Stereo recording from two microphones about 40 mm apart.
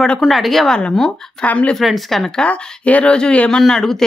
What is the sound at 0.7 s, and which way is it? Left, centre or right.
Speech, left.